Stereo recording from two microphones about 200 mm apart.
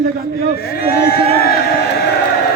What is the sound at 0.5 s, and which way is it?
Speech, 50° left (ahead or behind).